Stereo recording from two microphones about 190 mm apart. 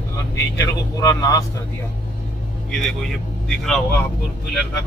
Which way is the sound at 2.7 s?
Centre (ahead or behind).